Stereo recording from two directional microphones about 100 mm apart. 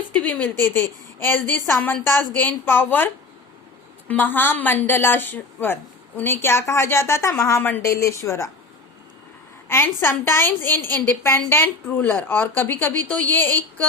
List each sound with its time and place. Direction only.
0.1 s a woman's voice: 15° left (ahead or behind)
4.1 s a woman's voice: 20° left (ahead or behind)
9.6 s a woman's voice: 25° left (ahead or behind)